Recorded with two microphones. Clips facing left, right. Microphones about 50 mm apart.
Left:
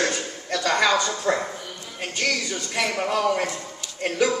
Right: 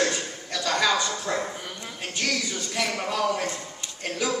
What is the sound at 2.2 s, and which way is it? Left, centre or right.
Music, centre.